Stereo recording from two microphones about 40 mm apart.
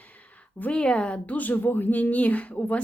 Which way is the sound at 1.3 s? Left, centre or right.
Left.